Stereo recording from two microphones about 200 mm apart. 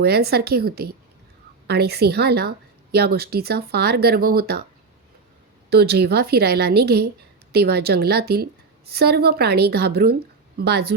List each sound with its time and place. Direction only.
0.0 s a woman's voice: 50° right (ahead or behind)
5.7 s a woman's voice: 55° right (ahead or behind)